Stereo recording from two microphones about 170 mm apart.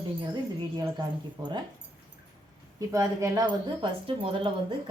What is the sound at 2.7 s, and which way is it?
Speech, 20° right (ahead or behind).